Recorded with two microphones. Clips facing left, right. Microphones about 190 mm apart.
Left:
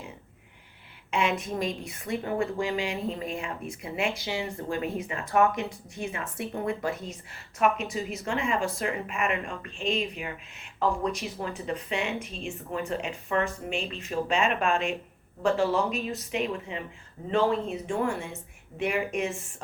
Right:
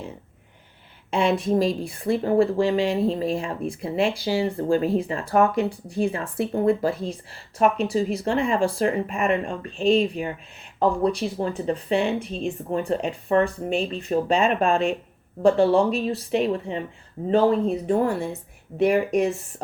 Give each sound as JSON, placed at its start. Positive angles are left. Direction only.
{"t": 1.1, "sound": "a woman's voice", "side_deg": -35}